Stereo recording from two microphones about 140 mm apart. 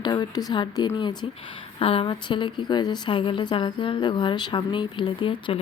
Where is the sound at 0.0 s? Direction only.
30° left (ahead or behind).